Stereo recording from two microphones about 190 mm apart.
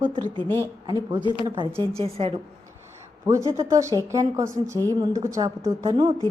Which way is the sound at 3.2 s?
15° right (ahead or behind).